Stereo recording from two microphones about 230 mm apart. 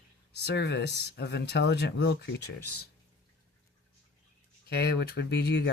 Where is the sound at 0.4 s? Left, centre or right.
Left.